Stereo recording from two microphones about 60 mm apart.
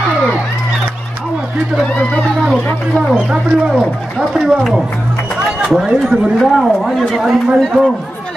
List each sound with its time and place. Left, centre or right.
3.1 s speech: centre
6.0 s speech: centre